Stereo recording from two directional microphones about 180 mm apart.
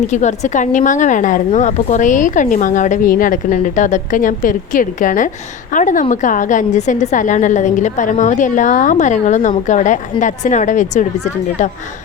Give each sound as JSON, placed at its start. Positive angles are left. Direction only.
{"t": 0.1, "sound": "a woman's voice", "side_deg": 40}